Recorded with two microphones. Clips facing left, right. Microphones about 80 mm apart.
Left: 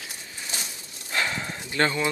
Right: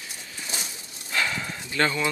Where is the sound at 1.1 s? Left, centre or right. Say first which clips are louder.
Even; left.